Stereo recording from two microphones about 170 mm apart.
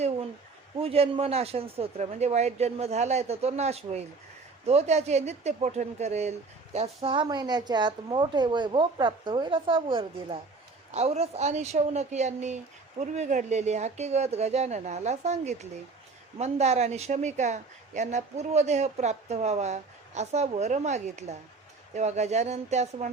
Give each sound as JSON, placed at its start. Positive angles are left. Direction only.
{"t": 0.8, "sound": "a woman's voice", "side_deg": -35}